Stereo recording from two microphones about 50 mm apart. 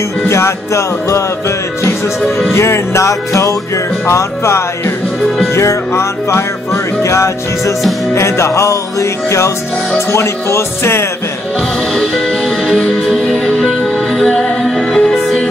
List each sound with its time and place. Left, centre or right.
0.3 s music: left
1.8 s speech: left
3.7 s music: left
5.5 s speech: left
7.0 s music: left
8.1 s music: left
9.9 s speech: left
12.6 s music: centre
13.3 s music: left